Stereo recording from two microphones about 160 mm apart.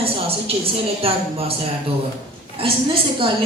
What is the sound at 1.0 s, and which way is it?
Speech, 35° right (ahead or behind).